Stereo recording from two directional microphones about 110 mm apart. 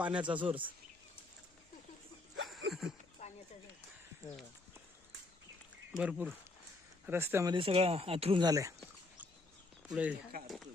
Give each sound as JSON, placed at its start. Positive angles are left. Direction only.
{"t": 0.0, "sound": "speech", "side_deg": -10}
{"t": 2.5, "sound": "a sound", "side_deg": 0}
{"t": 3.2, "sound": "a sound", "side_deg": 90}
{"t": 6.0, "sound": "speech", "side_deg": -10}
{"t": 7.0, "sound": "speech", "side_deg": -20}
{"t": 7.5, "sound": "speech", "side_deg": -60}
{"t": 8.4, "sound": "speech", "side_deg": -35}
{"t": 9.9, "sound": "speech", "side_deg": -5}